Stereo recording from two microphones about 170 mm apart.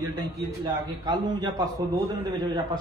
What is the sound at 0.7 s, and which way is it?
A man's voice, 25° right (ahead or behind).